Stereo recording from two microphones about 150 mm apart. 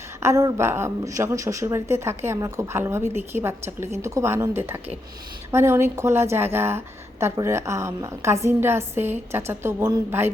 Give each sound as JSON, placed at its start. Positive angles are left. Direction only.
{"t": 0.2, "sound": "a woman's voice", "side_deg": -20}